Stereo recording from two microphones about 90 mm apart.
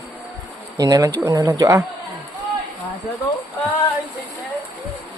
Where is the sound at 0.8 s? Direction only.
45° right (ahead or behind).